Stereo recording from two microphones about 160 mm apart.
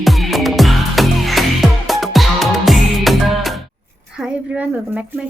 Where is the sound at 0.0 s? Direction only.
Centre (ahead or behind).